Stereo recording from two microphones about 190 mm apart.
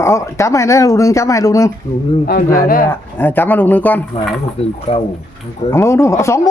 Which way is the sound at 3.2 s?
10° left (ahead or behind).